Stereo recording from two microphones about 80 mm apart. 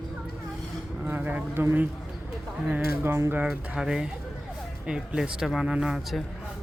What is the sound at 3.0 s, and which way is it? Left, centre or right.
Music, right.